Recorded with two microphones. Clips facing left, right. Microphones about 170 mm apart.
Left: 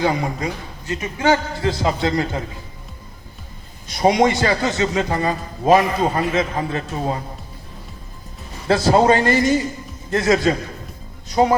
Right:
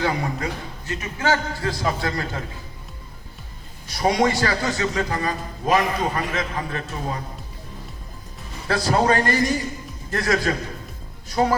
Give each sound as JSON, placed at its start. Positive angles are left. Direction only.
{"t": 0.0, "sound": "a man's voice", "side_deg": 20}
{"t": 3.8, "sound": "a man's voice", "side_deg": 20}
{"t": 8.6, "sound": "a man's voice", "side_deg": 25}